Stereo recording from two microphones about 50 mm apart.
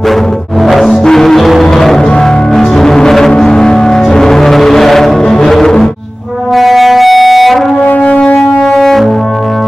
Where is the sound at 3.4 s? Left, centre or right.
Centre.